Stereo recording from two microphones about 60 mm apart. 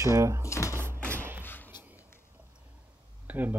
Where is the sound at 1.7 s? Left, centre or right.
Right.